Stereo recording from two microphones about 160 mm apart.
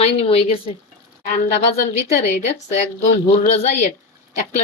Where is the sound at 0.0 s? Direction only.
40° left (ahead or behind).